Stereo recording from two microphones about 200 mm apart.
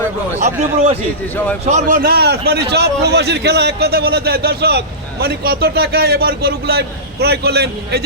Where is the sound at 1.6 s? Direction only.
40° right (ahead or behind).